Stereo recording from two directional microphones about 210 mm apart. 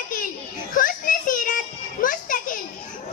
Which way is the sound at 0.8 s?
40° left (ahead or behind).